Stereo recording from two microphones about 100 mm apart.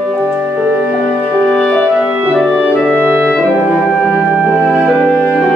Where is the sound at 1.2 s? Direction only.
10° left (ahead or behind).